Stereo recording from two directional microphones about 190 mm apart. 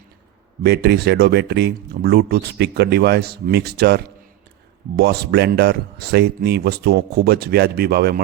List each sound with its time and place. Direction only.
0.6 s speech: 60° right (ahead or behind)